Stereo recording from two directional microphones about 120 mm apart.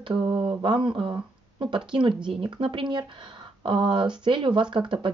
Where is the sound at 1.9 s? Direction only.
40° right (ahead or behind).